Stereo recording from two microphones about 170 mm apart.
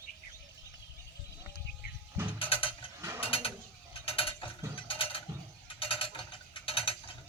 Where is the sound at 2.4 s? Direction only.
30° left (ahead or behind).